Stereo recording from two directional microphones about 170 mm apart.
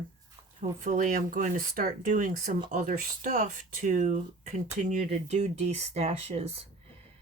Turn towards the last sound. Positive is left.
turn(degrees=-40)  # may be behind; listen again after turning